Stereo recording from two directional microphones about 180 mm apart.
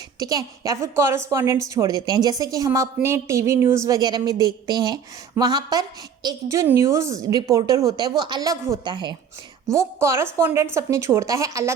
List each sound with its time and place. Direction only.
0.2 s a woman's voice: 20° right (ahead or behind)